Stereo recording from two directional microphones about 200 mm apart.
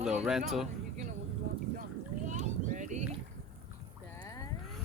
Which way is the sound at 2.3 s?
40° right (ahead or behind).